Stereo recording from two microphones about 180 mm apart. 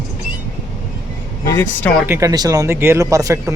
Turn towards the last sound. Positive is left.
turn(degrees=-15)  # may be behind; listen again after turning